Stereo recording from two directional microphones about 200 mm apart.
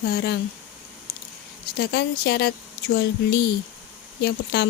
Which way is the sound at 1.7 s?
55° left (ahead or behind).